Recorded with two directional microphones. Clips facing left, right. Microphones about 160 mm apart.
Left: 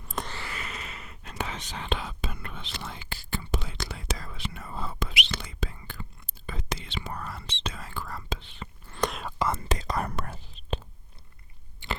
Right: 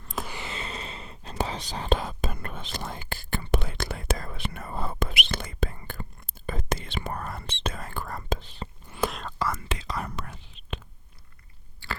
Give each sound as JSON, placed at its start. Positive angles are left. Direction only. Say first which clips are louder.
{"t": 0.0, "sound": "a sound", "louder": "even", "side_deg": 5}
{"t": 0.3, "sound": "whispering", "louder": "right 2 dB", "side_deg": -20}
{"t": 8.9, "sound": "whispering", "louder": "right 1 dB", "side_deg": -5}
{"t": 9.6, "sound": "whispering", "louder": "left 3 dB", "side_deg": 40}
{"t": 10.3, "sound": "whispering", "louder": "left 4 dB", "side_deg": 35}
{"t": 11.8, "sound": "chewing", "louder": "left 2 dB", "side_deg": 20}